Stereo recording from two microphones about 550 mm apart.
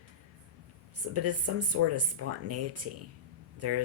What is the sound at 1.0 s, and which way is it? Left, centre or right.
Speech, right.